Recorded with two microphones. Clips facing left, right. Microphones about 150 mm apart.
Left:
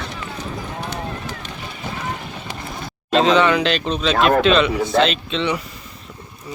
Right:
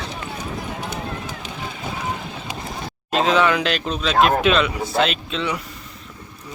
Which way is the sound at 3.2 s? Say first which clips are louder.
Left 2 dB; 5° right (ahead or behind).